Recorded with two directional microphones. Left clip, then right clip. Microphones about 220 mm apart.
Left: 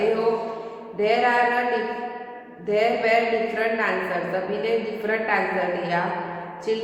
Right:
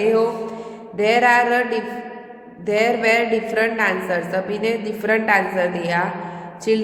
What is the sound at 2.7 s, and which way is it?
A woman's voice, 55° right (ahead or behind).